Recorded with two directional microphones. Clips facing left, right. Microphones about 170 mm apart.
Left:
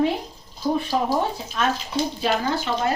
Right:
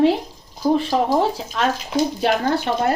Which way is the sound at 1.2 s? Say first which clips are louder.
Right 4 dB; 90° right.